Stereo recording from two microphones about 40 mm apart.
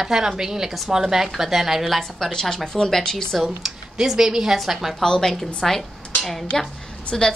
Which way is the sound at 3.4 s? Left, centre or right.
Centre.